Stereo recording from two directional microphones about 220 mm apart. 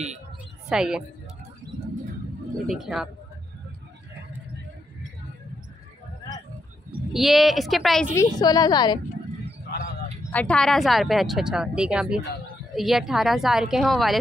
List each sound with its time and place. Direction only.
0.7 s a woman's voice: 5° right (ahead or behind)
2.7 s a woman's voice: centre (ahead or behind)
7.1 s a woman's voice: centre (ahead or behind)
8.2 s a woman's voice: 15° left (ahead or behind)
10.3 s a woman's voice: 5° left (ahead or behind)